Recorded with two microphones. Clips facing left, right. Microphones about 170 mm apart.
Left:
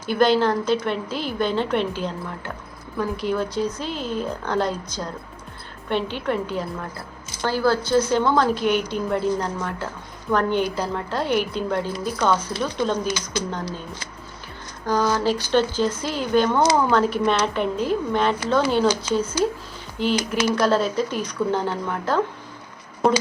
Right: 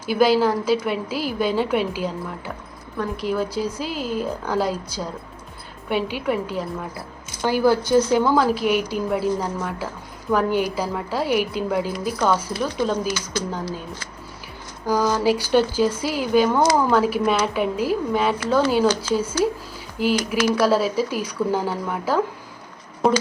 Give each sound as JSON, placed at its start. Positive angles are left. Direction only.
{"t": 0.0, "sound": "a woman's voice", "side_deg": -5}
{"t": 14.8, "sound": "a woman's voice", "side_deg": -10}